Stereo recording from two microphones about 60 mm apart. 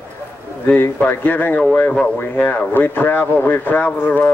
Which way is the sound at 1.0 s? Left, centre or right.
Left.